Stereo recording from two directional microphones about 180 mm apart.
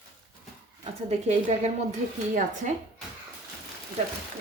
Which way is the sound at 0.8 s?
40° right (ahead or behind).